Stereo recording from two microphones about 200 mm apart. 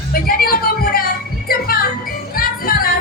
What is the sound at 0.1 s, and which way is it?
Music, 50° left (ahead or behind).